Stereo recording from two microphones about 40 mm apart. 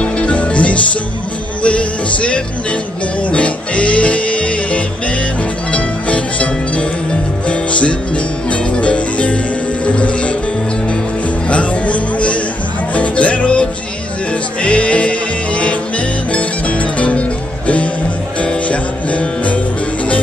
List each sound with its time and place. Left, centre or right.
0.0 s music: left
11.4 s music: left